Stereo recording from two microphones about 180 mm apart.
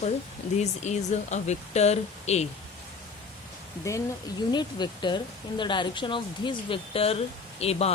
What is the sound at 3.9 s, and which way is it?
Speech, 15° left (ahead or behind).